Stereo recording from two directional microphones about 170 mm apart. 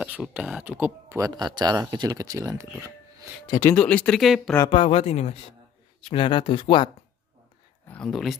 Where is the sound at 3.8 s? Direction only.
5° left (ahead or behind).